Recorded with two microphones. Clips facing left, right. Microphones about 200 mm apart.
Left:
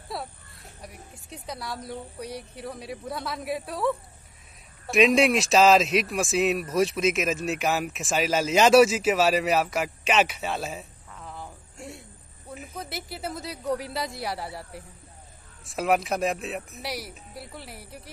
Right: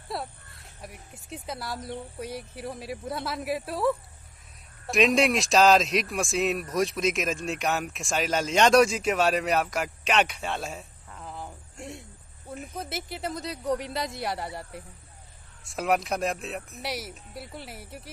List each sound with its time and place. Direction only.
0.1 s speech: centre (ahead or behind)